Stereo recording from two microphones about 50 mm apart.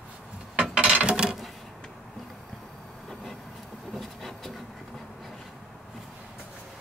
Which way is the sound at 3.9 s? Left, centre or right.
Centre.